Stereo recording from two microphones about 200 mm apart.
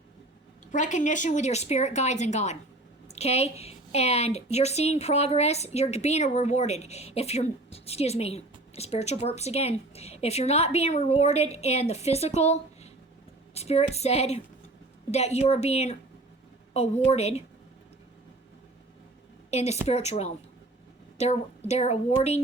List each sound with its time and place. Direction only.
0.7 s a woman's voice: 40° left (ahead or behind)
19.5 s a woman's voice: 35° left (ahead or behind)